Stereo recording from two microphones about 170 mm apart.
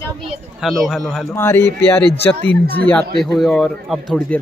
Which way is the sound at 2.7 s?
10° left (ahead or behind).